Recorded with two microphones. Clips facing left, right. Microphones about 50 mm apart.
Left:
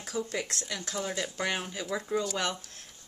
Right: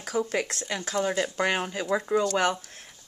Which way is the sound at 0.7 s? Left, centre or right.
Right.